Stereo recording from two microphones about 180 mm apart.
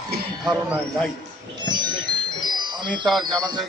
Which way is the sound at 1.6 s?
25° right (ahead or behind).